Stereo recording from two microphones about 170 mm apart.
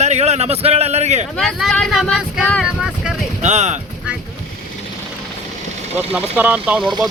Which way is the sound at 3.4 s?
45° right (ahead or behind).